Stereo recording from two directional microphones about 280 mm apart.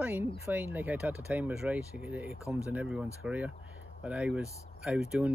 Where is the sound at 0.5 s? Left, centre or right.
Centre.